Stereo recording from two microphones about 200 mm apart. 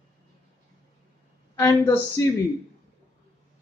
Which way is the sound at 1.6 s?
15° left (ahead or behind).